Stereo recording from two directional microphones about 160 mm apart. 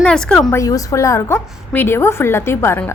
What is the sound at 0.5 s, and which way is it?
A woman's voice, 20° left (ahead or behind).